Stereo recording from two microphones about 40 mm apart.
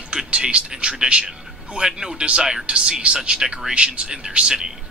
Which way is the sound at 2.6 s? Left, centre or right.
Right.